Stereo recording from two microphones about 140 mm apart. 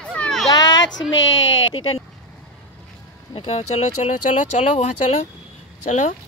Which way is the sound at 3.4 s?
50° left (ahead or behind).